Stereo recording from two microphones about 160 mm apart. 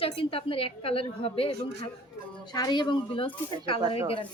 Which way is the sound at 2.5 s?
25° left (ahead or behind).